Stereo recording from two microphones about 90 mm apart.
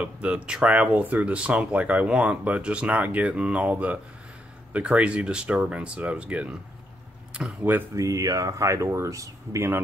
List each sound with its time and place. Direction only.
0.0 s speech: 15° right (ahead or behind)
7.9 s speech: 40° right (ahead or behind)